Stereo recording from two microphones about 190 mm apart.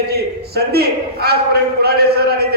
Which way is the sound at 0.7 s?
55° right (ahead or behind).